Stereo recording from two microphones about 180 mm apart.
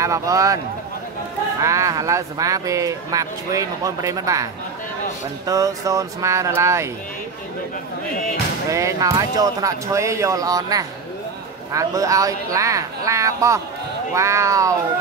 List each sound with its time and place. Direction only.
0.0 s speech: 20° right (ahead or behind)
1.6 s speech: 15° right (ahead or behind)
5.5 s speech: 20° right (ahead or behind)
8.6 s speech: 20° right (ahead or behind)